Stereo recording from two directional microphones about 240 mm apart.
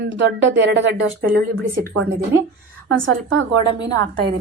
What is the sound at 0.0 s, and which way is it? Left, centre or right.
Speech, right.